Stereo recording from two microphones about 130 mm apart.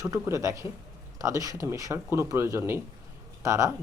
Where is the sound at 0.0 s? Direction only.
25° right (ahead or behind).